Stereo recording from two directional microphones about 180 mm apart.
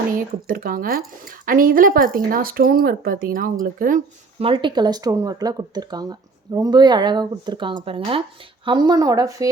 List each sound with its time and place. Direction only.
0.2 s speech: 50° right (ahead or behind)
4.4 s speech: 30° right (ahead or behind)